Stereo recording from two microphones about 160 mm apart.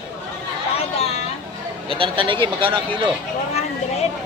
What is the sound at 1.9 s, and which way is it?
Speech, 30° right (ahead or behind).